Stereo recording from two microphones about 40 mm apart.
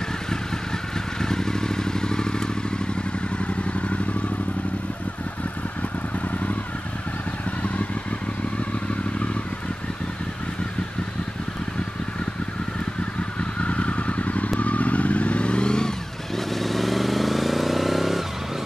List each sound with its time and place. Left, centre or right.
0.9 s vehicle: centre
3.3 s vehicle: left
13.4 s motorcycle: left
14.6 s vehicle: left
16.3 s vehicle: centre